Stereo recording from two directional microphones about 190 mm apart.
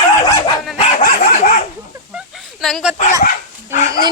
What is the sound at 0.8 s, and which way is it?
Dog, 35° left (ahead or behind).